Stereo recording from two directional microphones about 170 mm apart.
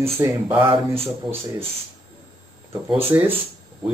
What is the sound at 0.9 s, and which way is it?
Speech, 35° right (ahead or behind).